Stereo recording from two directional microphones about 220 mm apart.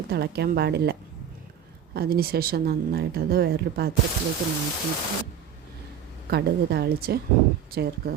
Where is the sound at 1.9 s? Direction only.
45° right (ahead or behind).